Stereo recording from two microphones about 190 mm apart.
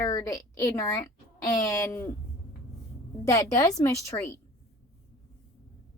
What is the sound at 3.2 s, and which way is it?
A woman's voice, 15° left (ahead or behind).